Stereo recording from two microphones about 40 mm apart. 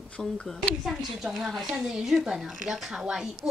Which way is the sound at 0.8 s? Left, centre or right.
Centre.